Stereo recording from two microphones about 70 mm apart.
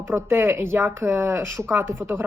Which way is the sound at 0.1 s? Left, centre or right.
Right.